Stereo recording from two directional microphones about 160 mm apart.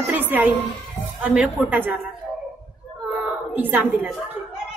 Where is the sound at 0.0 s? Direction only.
10° right (ahead or behind).